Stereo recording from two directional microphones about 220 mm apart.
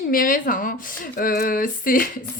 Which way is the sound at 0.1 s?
40° left (ahead or behind).